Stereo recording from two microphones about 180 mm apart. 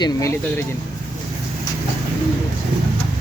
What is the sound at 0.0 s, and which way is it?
Speech, 20° left (ahead or behind).